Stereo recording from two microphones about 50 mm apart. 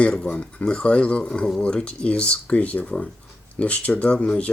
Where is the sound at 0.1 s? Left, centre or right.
Centre.